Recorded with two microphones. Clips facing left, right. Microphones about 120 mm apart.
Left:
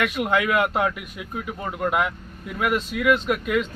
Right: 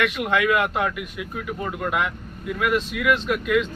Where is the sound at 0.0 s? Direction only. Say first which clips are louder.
Even; 30° left (ahead or behind).